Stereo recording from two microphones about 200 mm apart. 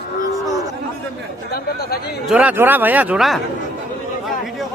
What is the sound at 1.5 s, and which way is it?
Chatter, 50° left (ahead or behind).